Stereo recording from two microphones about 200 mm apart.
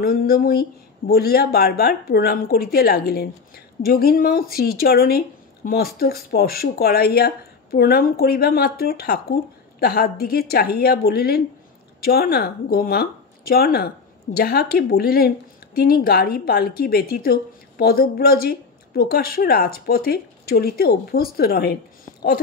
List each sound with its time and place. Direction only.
0.0 s a woman's voice: 45° left (ahead or behind)